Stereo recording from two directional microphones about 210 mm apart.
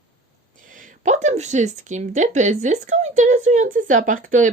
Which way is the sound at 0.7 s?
40° right (ahead or behind).